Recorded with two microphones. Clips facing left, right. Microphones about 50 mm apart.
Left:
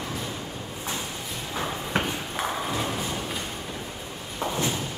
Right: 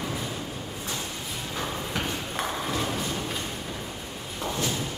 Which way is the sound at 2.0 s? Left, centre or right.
Centre.